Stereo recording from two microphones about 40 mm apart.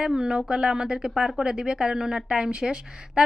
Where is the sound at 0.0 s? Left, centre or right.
Right.